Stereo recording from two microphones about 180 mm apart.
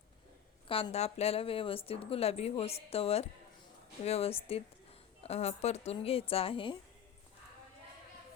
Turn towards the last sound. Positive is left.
turn(degrees=30)  # may be behind; listen again after turning